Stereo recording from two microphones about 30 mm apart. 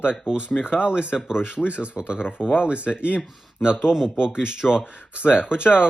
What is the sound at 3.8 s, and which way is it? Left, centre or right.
Speech, right.